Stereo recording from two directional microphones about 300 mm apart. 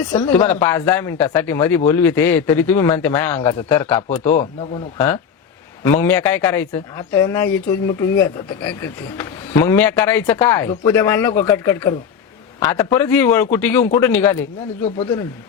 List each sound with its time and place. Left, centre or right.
0.1 s speech: centre
4.2 s a man's voice: left
5.8 s speech: centre
14.8 s a man's voice: centre